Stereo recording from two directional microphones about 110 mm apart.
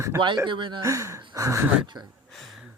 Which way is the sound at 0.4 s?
50° right (ahead or behind).